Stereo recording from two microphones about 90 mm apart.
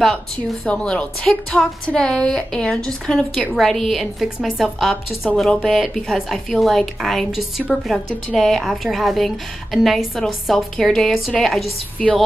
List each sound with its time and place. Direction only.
0.7 s a woman's voice: 10° left (ahead or behind)